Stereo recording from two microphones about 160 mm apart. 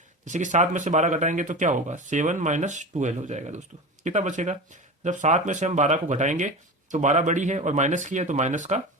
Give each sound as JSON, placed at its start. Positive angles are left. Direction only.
{"t": 0.3, "sound": "speech", "side_deg": -50}